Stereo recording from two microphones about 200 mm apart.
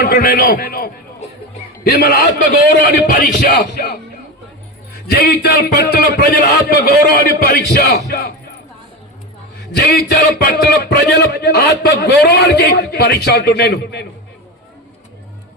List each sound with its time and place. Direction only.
0.0 s a man's voice: 50° left (ahead or behind)
5.0 s a man's voice: 50° left (ahead or behind)
10.1 s a man's voice: 50° left (ahead or behind)